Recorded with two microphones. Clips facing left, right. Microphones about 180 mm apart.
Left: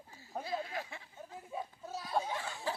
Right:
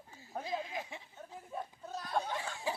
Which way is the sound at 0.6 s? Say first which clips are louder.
Even; 15° right (ahead or behind).